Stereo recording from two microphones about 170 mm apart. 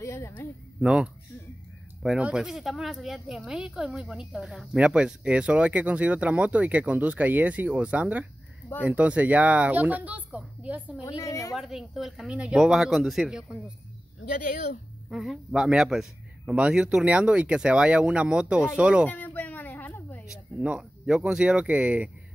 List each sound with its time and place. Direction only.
0.0 s a sound: 15° left (ahead or behind)
0.7 s a man's voice: 5° right (ahead or behind)
11.1 s a woman's voice: 20° left (ahead or behind)
11.5 s a man's voice: centre (ahead or behind)
15.0 s a man's voice: centre (ahead or behind)
19.0 s a sound: 10° left (ahead or behind)
20.2 s speech: 5° right (ahead or behind)